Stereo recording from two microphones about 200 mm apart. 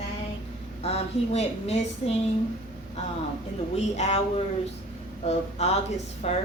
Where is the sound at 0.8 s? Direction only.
30° left (ahead or behind).